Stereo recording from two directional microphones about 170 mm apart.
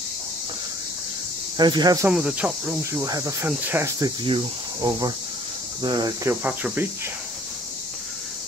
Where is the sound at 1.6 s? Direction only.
25° right (ahead or behind).